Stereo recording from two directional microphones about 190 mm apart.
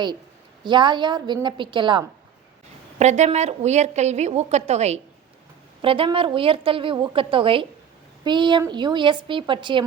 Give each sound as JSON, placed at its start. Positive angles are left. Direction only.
{"t": 0.6, "sound": "a woman's voice", "side_deg": -25}
{"t": 3.0, "sound": "a woman's voice", "side_deg": -35}